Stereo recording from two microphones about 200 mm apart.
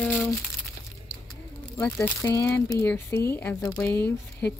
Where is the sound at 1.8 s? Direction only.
10° left (ahead or behind).